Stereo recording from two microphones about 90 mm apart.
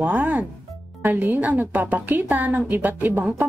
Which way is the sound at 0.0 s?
20° right (ahead or behind).